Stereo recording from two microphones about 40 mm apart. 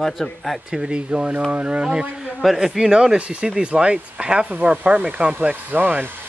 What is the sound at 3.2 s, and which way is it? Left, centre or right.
Speech, right.